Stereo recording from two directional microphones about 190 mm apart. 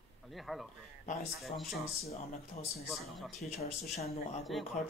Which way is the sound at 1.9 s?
35° left (ahead or behind).